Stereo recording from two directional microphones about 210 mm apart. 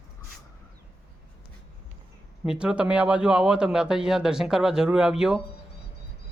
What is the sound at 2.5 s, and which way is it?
Speech, 5° right (ahead or behind).